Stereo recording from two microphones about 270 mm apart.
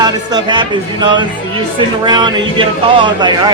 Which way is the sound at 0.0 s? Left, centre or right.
Centre.